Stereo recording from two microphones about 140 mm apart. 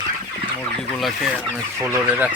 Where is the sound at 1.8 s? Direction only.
15° right (ahead or behind).